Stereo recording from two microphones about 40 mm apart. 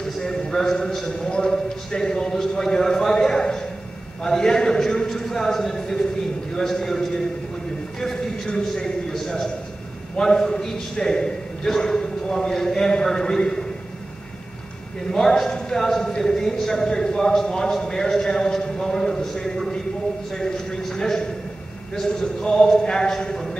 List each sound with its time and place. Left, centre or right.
0.0 s a man's voice: centre
4.2 s a sound: centre
6.5 s a man's voice: centre
8.0 s a sound: centre
10.1 s a man's voice: centre
15.0 s a man's voice: centre